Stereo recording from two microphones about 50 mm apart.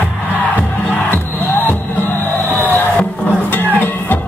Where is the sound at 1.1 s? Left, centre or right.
Left.